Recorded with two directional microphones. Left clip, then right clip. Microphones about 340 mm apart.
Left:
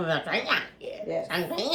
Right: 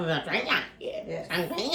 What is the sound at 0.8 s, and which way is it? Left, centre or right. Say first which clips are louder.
Speech: right 2 dB; centre.